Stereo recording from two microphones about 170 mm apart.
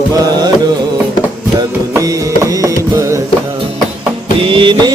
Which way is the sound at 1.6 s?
20° right (ahead or behind).